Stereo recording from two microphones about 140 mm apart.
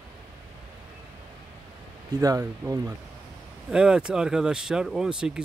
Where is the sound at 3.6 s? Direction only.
5° right (ahead or behind).